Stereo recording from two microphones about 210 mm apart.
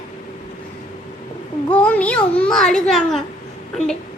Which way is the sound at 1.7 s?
5° left (ahead or behind).